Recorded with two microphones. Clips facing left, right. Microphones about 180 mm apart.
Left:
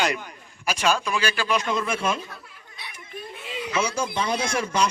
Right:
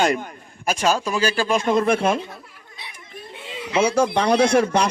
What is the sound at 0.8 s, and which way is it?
Speech, 35° right (ahead or behind).